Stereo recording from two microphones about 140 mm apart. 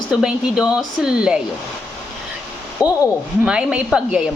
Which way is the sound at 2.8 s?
10° right (ahead or behind).